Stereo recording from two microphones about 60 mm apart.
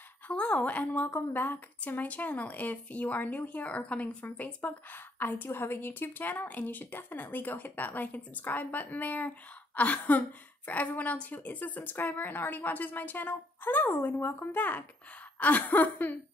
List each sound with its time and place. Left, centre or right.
0.3 s a woman's voice: centre